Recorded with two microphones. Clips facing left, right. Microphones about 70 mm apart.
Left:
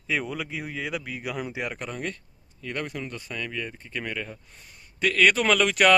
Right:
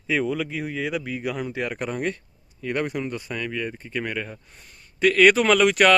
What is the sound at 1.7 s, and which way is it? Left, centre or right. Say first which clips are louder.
Speech: right 6 dB; centre.